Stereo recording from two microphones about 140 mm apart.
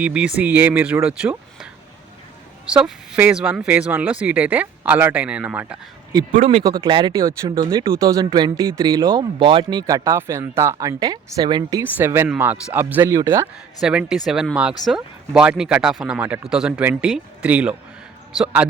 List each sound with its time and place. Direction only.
0.0 s speech: 10° right (ahead or behind)
6.4 s speech: 45° right (ahead or behind)
6.8 s speech: 35° right (ahead or behind)
11.9 s speech: 15° right (ahead or behind)
13.8 s speech: 5° right (ahead or behind)